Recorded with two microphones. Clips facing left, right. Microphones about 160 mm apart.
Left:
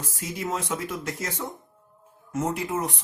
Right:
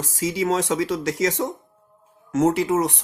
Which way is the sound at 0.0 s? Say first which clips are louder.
Right 9 dB; 90° right.